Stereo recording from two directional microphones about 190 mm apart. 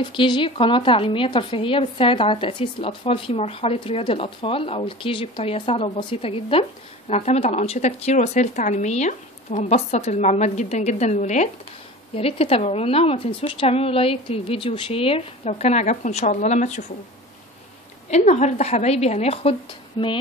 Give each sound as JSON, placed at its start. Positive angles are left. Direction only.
{"t": 0.0, "sound": "a woman's voice", "side_deg": 25}
{"t": 18.1, "sound": "a woman's voice", "side_deg": 35}